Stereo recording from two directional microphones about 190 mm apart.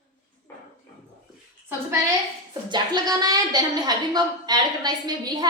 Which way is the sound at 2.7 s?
20° right (ahead or behind).